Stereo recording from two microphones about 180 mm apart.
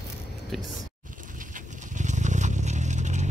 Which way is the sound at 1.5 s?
45° right (ahead or behind).